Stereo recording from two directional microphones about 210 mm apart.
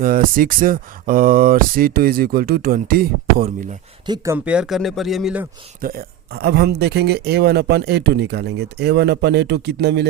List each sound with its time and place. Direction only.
0.0 s speech: 40° right (ahead or behind)
4.0 s speech: 15° right (ahead or behind)
5.8 s speech: 45° right (ahead or behind)